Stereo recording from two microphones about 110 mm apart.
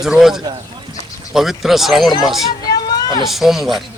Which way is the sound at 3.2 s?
Centre (ahead or behind).